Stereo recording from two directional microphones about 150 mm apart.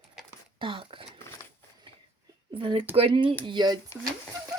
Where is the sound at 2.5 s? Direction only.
35° right (ahead or behind).